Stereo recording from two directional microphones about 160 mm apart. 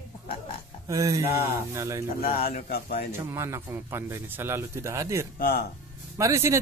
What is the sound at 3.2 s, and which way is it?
Speech, 15° right (ahead or behind).